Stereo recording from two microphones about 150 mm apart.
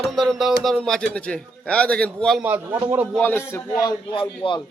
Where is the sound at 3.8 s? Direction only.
30° left (ahead or behind).